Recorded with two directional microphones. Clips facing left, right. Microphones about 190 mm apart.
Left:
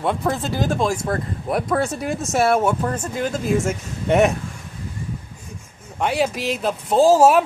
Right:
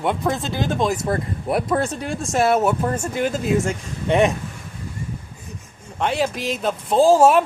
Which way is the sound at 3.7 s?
5° left (ahead or behind).